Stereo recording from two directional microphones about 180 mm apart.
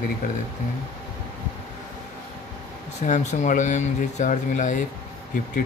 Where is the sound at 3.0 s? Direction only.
40° left (ahead or behind).